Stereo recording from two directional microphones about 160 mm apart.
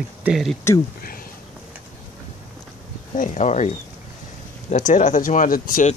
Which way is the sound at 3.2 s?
50° left (ahead or behind).